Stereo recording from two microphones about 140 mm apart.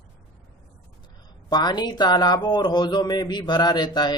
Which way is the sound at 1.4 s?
30° left (ahead or behind).